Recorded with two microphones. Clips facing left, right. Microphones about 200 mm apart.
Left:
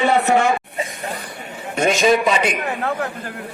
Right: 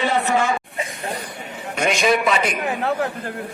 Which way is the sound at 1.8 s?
40° left (ahead or behind).